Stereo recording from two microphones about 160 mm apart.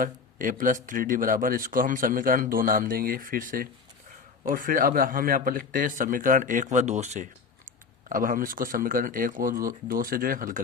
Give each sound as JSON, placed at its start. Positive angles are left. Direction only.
{"t": 0.0, "sound": "speech", "side_deg": -55}
{"t": 8.1, "sound": "speech", "side_deg": -60}